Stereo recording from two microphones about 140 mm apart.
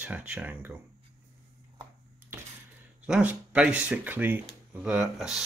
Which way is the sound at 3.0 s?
10° right (ahead or behind).